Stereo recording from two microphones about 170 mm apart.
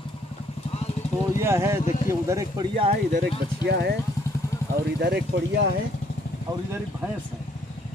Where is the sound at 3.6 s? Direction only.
75° right (ahead or behind).